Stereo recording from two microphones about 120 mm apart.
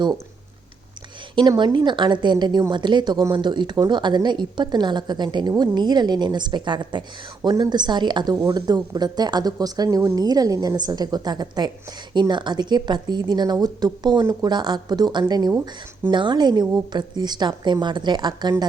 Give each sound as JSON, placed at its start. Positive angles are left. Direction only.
{"t": 1.4, "sound": "speech", "side_deg": -40}